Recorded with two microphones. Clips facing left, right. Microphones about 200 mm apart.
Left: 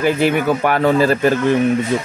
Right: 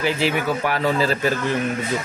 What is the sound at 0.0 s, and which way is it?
Speech, 55° left (ahead or behind).